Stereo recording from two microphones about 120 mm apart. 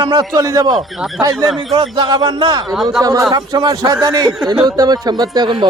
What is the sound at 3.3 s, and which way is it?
Speech, 35° right (ahead or behind).